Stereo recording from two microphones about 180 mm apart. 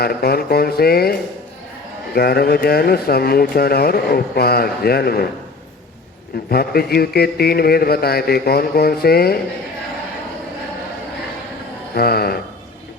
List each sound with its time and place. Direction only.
0.0 s speech: 60° left (ahead or behind)
2.1 s speech: 60° left (ahead or behind)
6.5 s speech: 60° left (ahead or behind)
11.9 s speech: 60° left (ahead or behind)